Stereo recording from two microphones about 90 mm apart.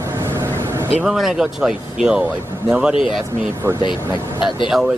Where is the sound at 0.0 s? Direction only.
30° right (ahead or behind).